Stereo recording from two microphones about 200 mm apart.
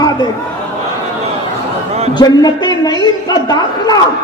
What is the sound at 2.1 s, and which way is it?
A man's voice, 20° left (ahead or behind).